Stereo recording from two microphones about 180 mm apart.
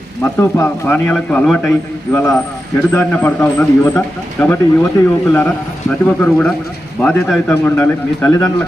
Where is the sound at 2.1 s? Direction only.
15° left (ahead or behind).